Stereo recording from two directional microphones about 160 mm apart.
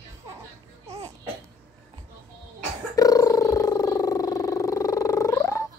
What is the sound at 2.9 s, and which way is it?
Purr, 20° left (ahead or behind).